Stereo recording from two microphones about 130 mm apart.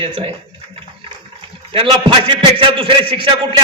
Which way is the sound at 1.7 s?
45° right (ahead or behind).